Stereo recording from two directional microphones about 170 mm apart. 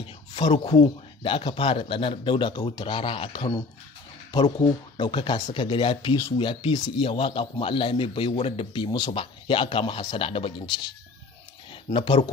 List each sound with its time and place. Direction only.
0.0 s a man's voice: 30° left (ahead or behind)
11.9 s a man's voice: 30° left (ahead or behind)